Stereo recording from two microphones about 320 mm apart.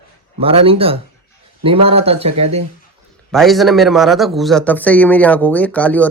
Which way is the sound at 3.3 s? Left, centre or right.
Centre.